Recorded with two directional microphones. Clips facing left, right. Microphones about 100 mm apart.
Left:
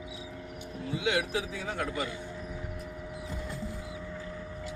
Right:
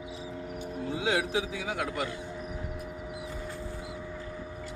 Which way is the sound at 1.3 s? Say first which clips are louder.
Right 2 dB; 20° right (ahead or behind).